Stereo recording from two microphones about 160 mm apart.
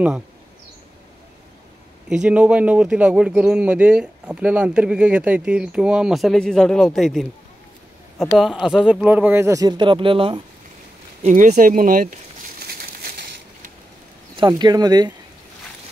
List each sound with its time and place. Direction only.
2.0 s speech: 5° right (ahead or behind); by 10.4 s 35° right (ahead or behind)
11.2 s crumpling: 50° right (ahead or behind); by 13.4 s 70° right (ahead or behind)
14.3 s speech: 30° right (ahead or behind)